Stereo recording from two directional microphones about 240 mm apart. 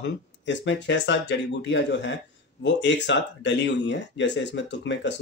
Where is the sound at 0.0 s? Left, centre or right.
Left.